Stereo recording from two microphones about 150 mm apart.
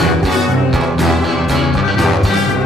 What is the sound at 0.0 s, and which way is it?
Music, centre (ahead or behind).